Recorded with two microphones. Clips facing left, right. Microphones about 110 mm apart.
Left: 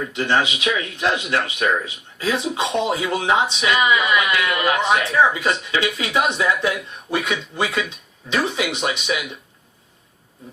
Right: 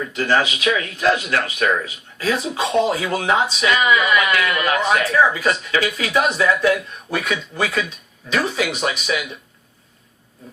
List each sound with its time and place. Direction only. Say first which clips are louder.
0.1 s speech: right 2 dB; 25° left (ahead or behind)